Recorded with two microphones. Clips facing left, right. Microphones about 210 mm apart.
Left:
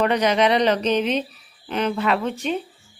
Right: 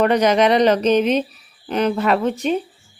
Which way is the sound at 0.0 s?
45° right (ahead or behind).